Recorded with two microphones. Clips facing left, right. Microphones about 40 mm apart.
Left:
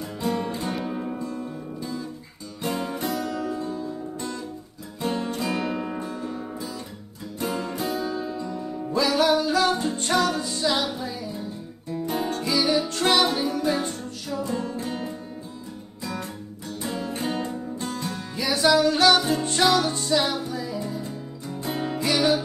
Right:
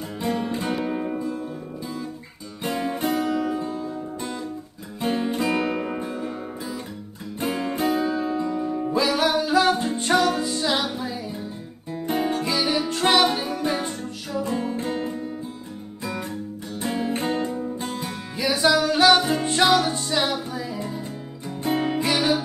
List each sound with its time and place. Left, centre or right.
0.2 s music: right
0.8 s music: right
2.6 s music: right
5.0 s music: right
7.3 s music: right
7.9 s music: right
9.0 s music: centre
11.9 s guitar: right
12.2 s music: centre
16.8 s music: right
17.7 s music: centre
19.1 s music: right